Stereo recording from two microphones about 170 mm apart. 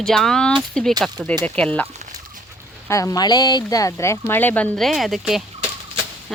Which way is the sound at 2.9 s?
20° left (ahead or behind).